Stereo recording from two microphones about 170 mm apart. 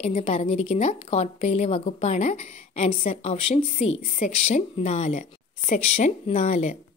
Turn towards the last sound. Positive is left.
turn(degrees=40)  # may be behind; listen again after turning